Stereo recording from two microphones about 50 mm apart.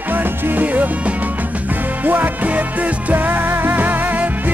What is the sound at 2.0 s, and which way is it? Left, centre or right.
Music, right.